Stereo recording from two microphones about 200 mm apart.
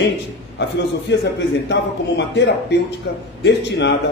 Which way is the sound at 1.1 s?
60° left (ahead or behind).